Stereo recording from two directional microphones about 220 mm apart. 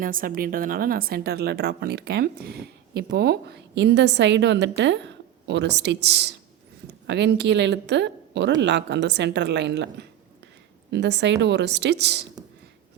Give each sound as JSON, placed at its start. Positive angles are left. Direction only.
{"t": 0.0, "sound": "a woman's voice", "side_deg": -40}